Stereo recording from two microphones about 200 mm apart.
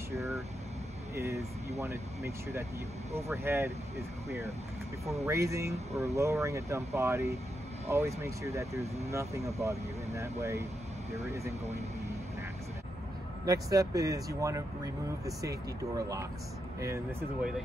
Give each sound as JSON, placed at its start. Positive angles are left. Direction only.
{"t": 0.1, "sound": "vehicle", "side_deg": -15}
{"t": 1.1, "sound": "speech", "side_deg": -15}
{"t": 5.2, "sound": "speech", "side_deg": -15}
{"t": 13.5, "sound": "speech", "side_deg": -15}